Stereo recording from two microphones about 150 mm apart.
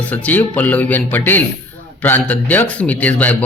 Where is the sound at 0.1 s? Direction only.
10° left (ahead or behind).